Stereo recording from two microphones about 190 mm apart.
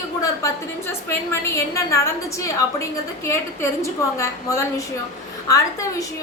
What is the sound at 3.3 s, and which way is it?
A woman's voice, 15° left (ahead or behind).